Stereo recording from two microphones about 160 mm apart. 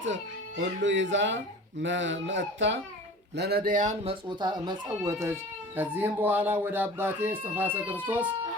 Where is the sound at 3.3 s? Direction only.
85° right.